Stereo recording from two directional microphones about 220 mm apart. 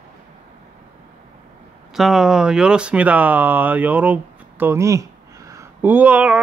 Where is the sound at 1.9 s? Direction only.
Centre (ahead or behind).